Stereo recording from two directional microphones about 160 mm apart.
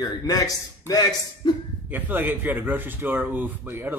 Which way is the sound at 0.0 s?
20° left (ahead or behind).